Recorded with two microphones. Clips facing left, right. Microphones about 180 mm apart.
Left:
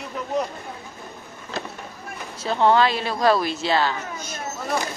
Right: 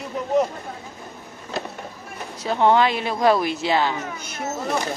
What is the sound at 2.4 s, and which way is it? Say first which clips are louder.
A woman's voice: right 1 dB; 15° right (ahead or behind).